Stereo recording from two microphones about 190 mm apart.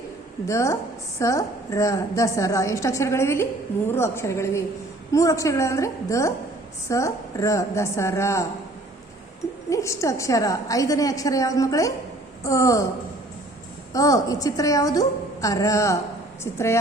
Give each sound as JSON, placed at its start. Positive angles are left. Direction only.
{"t": 0.4, "sound": "a woman's voice", "side_deg": 15}
{"t": 9.6, "sound": "a woman's voice", "side_deg": 15}
{"t": 13.9, "sound": "a woman's voice", "side_deg": 20}